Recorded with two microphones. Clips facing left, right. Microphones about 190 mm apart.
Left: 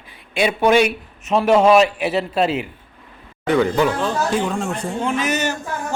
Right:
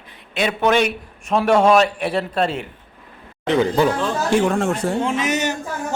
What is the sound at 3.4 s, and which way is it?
Speech, 30° right (ahead or behind).